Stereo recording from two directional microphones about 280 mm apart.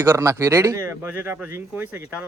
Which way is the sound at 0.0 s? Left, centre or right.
Centre.